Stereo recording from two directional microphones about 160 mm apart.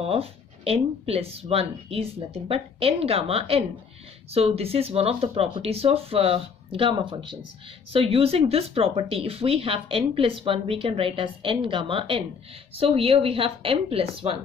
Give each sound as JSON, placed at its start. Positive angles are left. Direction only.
{"t": 0.0, "sound": "speech", "side_deg": -40}